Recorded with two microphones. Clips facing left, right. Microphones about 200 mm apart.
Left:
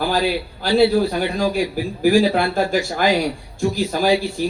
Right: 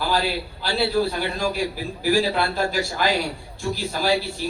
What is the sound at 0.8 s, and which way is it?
A man's voice, 50° left (ahead or behind).